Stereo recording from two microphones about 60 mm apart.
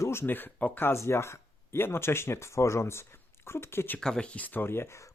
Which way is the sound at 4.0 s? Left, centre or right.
Centre.